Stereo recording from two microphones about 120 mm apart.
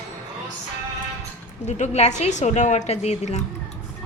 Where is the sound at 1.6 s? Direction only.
75° left (ahead or behind).